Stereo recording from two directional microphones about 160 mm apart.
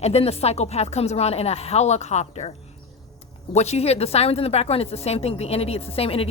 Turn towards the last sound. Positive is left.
turn(degrees=35)  # may be behind; listen again after turning